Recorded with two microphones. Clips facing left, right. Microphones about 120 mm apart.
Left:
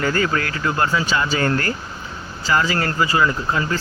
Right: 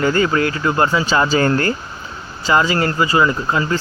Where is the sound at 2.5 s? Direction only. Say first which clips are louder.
Right 4 dB; 20° right (ahead or behind).